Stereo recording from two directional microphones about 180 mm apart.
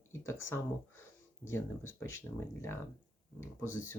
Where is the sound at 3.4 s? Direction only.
15° left (ahead or behind).